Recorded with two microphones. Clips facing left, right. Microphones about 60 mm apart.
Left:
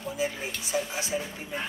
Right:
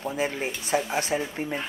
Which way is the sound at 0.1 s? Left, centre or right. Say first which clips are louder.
Even; right.